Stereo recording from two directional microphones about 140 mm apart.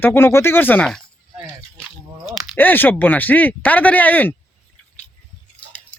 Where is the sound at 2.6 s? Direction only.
15° left (ahead or behind).